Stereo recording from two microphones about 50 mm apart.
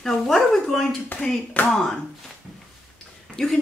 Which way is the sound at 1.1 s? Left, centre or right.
Left.